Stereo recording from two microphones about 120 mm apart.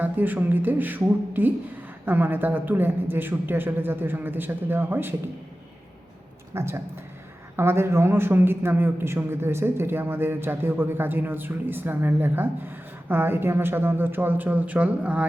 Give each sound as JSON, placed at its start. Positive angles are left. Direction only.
{"t": 0.0, "sound": "a man's voice", "side_deg": -15}
{"t": 6.5, "sound": "a man's voice", "side_deg": -20}